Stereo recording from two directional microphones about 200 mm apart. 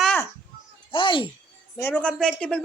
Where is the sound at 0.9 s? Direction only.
25° left (ahead or behind).